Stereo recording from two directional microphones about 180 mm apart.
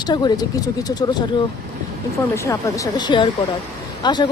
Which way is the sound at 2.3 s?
15° left (ahead or behind).